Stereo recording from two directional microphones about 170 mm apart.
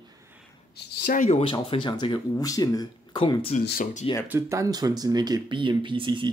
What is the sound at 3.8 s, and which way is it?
Speech, 45° left (ahead or behind).